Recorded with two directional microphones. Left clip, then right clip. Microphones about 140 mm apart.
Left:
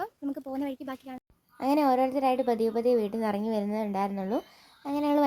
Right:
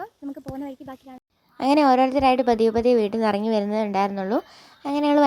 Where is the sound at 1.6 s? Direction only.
30° right (ahead or behind).